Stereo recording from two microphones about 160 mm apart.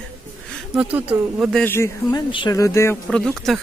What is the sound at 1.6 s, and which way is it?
Speech, 15° left (ahead or behind).